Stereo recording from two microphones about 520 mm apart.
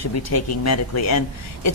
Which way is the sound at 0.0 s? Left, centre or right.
Left.